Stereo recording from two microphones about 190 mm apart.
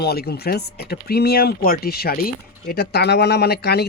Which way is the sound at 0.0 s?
55° left (ahead or behind).